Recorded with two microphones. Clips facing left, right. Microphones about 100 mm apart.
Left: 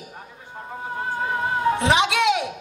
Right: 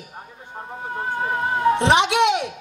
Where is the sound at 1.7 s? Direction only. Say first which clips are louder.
Right 3 dB; 20° right (ahead or behind).